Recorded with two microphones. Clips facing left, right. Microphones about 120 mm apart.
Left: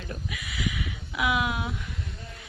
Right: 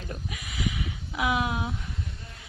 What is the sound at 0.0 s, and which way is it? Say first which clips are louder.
Speech: left 1 dB; 35° right (ahead or behind).